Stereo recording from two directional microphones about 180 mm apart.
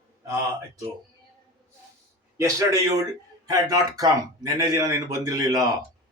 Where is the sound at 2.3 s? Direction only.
15° right (ahead or behind).